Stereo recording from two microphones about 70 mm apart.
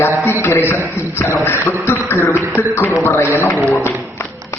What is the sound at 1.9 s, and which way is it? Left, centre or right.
A man's voice, left.